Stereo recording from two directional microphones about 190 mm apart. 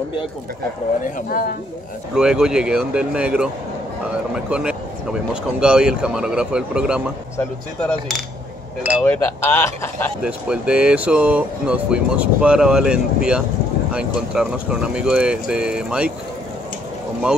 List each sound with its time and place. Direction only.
1.0 s speech: 45° left (ahead or behind)
2.1 s speech: 5° right (ahead or behind)
4.5 s speech: 5° right (ahead or behind)
7.3 s speech: 5° left (ahead or behind)
10.2 s speech: 5° right (ahead or behind)